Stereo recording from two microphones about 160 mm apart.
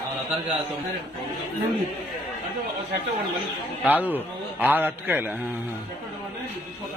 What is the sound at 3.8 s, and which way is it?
A man's voice, 10° right (ahead or behind).